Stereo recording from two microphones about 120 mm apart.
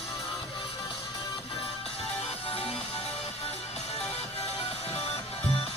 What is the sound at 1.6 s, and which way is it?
Music, 55° left (ahead or behind).